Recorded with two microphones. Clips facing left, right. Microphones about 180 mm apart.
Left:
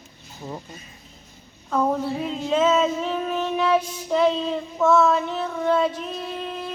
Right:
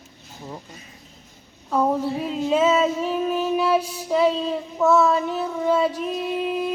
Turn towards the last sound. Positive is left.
turn(degrees=-10)  # may be behind; listen again after turning